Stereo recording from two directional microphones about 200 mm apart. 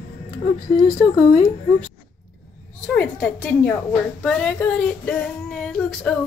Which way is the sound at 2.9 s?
10° left (ahead or behind).